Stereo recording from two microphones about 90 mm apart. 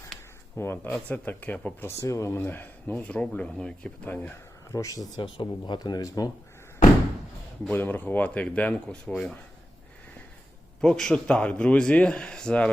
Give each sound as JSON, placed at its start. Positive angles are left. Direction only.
{"t": 0.5, "sound": "a man's voice", "side_deg": 25}
{"t": 2.0, "sound": "speech", "side_deg": 35}
{"t": 2.4, "sound": "a man's voice", "side_deg": 20}
{"t": 4.7, "sound": "speech", "side_deg": 40}
{"t": 5.2, "sound": "speech", "side_deg": 60}
{"t": 7.7, "sound": "a man's voice", "side_deg": 20}
{"t": 10.8, "sound": "a man's voice", "side_deg": 5}